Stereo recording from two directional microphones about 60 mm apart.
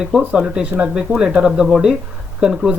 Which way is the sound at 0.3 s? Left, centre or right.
Centre.